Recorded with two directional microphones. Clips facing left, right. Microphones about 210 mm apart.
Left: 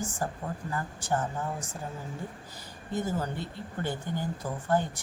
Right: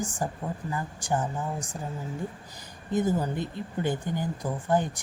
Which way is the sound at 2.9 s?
15° right (ahead or behind).